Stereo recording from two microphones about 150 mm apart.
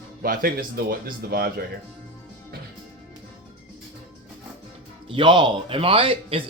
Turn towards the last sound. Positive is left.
turn(degrees=-35)  # may be behind; listen again after turning